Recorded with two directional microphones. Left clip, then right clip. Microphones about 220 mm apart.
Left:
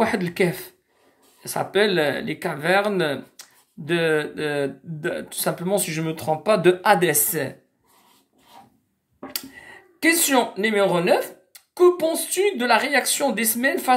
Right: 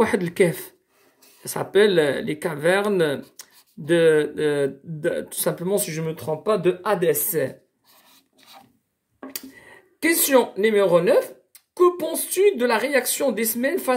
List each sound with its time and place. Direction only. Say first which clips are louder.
0.0 s speech: right 2 dB; 25° right (ahead or behind)
6.4 s speech: left 4 dB; 5° left (ahead or behind)
7.2 s speech: right 3 dB; 15° right (ahead or behind)
9.3 s speech: left 7 dB; 20° right (ahead or behind)